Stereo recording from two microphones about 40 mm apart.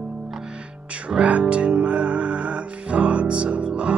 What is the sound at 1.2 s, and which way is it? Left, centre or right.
Music, right.